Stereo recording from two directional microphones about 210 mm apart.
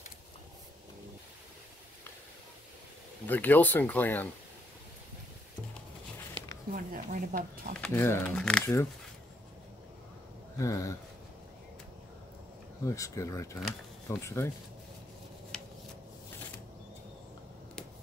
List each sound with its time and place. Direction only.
3.3 s speech: 10° left (ahead or behind)
6.7 s speech: 40° right (ahead or behind)
7.8 s speech: 10° left (ahead or behind)
10.6 s speech: 15° left (ahead or behind)
12.8 s speech: 15° left (ahead or behind)
15.5 s a sound: 5° left (ahead or behind)